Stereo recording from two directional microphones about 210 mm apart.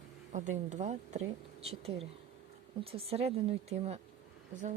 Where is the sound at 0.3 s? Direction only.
35° right (ahead or behind).